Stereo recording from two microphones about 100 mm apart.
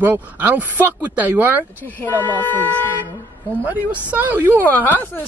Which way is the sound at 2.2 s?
20° left (ahead or behind).